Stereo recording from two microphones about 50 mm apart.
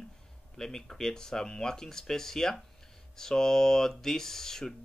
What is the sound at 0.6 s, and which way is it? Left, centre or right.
Speech, centre.